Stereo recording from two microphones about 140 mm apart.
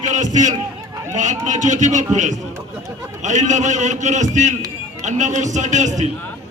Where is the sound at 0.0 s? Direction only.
60° right (ahead or behind).